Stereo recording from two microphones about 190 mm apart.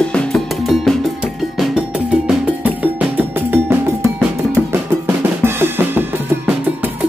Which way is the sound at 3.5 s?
10° right (ahead or behind).